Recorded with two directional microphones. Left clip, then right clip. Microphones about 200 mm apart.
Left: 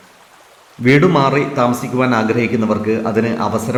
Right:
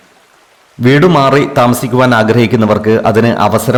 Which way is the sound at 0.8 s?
45° right (ahead or behind).